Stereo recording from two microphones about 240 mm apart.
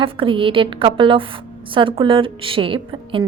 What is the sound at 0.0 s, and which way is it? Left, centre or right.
Speech, right.